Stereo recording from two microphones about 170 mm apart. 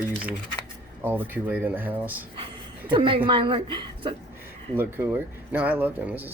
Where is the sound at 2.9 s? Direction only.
30° right (ahead or behind).